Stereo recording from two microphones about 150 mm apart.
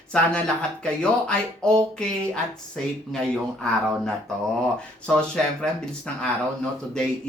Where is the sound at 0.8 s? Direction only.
5° left (ahead or behind).